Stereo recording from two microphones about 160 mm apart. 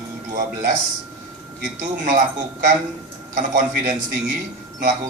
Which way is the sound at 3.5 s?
55° right (ahead or behind).